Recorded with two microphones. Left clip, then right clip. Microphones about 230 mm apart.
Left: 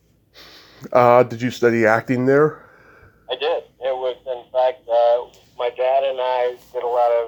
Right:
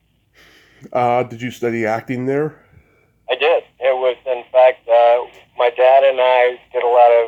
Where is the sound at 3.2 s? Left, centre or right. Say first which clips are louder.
Right 7 dB; right.